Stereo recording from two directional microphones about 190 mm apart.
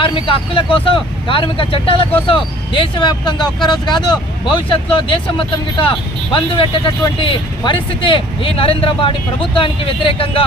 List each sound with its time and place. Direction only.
0.0 s speech: 25° left (ahead or behind)